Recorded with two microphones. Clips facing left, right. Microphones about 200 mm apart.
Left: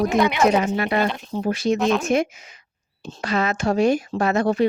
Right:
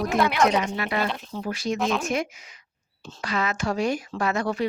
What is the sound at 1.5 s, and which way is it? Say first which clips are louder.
Speech: left 6 dB; 25° left (ahead or behind).